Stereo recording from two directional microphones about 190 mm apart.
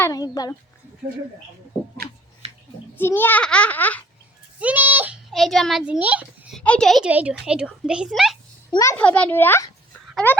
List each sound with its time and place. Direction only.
0.0 s a child's voice: 20° left (ahead or behind)
2.9 s a child's voice: 10° left (ahead or behind)
4.6 s a child's voice: 10° right (ahead or behind)
6.6 s a woman's voice: 5° left (ahead or behind)
8.7 s a child's voice: 15° left (ahead or behind)